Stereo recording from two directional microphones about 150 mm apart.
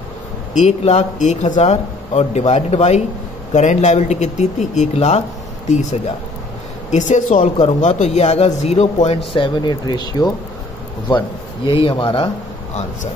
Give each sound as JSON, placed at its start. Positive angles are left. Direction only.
{"t": 0.5, "sound": "a man's voice", "side_deg": 50}